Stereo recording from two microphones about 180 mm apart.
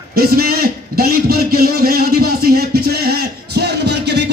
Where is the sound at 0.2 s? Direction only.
60° right (ahead or behind).